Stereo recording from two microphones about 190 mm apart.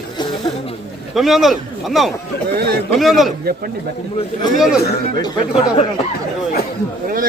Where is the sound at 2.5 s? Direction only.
55° right (ahead or behind).